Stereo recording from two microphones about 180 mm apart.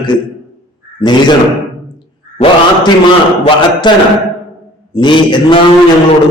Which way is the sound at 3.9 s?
25° left (ahead or behind).